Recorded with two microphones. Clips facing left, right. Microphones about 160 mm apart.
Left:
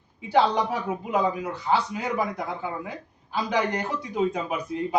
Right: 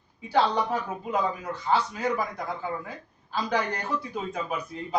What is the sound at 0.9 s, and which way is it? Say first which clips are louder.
Speech: left 3 dB; 15° left (ahead or behind).